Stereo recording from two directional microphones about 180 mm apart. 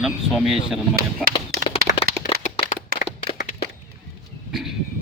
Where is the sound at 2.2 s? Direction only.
30° left (ahead or behind).